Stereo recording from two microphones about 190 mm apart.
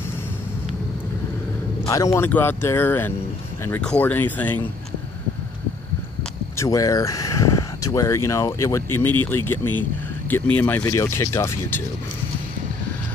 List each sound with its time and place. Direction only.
1.9 s speech: 15° left (ahead or behind)
6.5 s speech: 15° left (ahead or behind)